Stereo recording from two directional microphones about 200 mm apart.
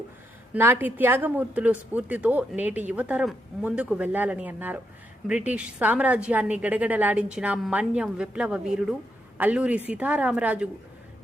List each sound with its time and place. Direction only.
0.5 s a woman's voice: 10° right (ahead or behind)